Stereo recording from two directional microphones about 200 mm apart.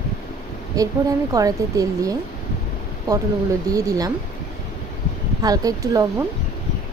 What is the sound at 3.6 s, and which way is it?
Speech, 15° right (ahead or behind).